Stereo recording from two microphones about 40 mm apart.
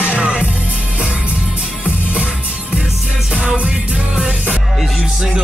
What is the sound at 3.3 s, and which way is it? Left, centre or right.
Music, right.